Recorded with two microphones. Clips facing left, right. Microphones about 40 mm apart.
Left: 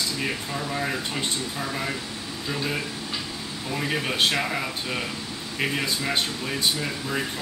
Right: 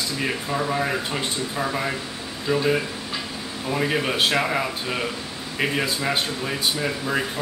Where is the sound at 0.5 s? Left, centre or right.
Right.